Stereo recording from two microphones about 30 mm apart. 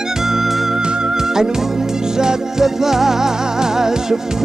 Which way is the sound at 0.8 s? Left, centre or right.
Right.